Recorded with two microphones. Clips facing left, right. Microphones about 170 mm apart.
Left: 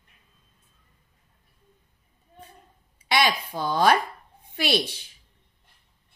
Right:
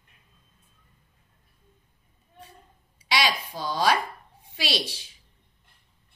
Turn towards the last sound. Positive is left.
turn(degrees=55)  # may be behind; listen again after turning